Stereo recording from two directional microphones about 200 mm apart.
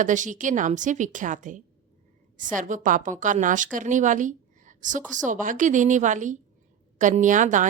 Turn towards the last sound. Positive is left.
turn(degrees=-40)  # may be behind; listen again after turning